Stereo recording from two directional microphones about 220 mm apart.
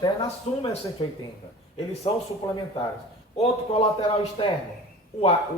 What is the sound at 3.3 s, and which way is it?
Speech, 30° left (ahead or behind).